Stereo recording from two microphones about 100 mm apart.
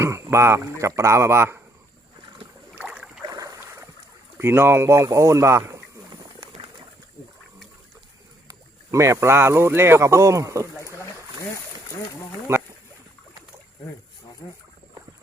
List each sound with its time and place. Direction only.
0.0 s speech: 30° right (ahead or behind)
2.7 s boat: 10° right (ahead or behind)
3.2 s boat: 35° right (ahead or behind)
4.4 s speech: 25° right (ahead or behind)
8.4 s speech: 30° right (ahead or behind)
12.5 s speech: 25° right (ahead or behind)
14.4 s speech: 45° left (ahead or behind)